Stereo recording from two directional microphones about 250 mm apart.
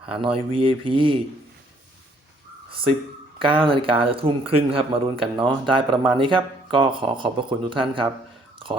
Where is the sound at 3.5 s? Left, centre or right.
Right.